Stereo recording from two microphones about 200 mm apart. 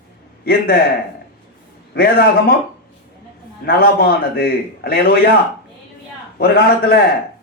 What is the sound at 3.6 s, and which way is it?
A man's voice, 50° left (ahead or behind).